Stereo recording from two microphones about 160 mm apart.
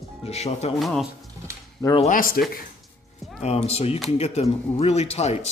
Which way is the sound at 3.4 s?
40° left (ahead or behind).